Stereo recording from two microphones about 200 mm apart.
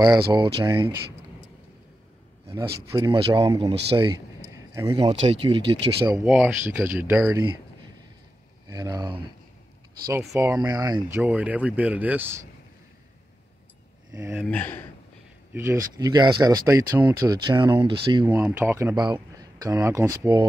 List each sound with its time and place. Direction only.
0.0 s speech: 20° right (ahead or behind)
2.9 s speech: 15° right (ahead or behind)
6.2 s speech: 5° right (ahead or behind)
8.6 s speech: 20° right (ahead or behind)
14.1 s speech: 15° right (ahead or behind)
14.4 s speech: 10° left (ahead or behind)
15.5 s speech: 15° right (ahead or behind)
18.2 s speech: 10° right (ahead or behind)